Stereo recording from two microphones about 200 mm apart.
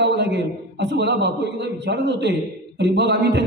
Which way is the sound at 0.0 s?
60° right (ahead or behind).